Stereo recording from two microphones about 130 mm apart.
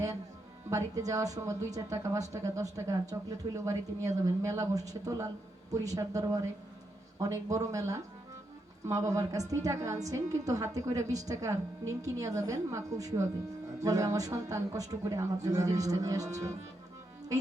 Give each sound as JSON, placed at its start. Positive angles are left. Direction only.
{"t": 0.7, "sound": "a woman's voice", "side_deg": -25}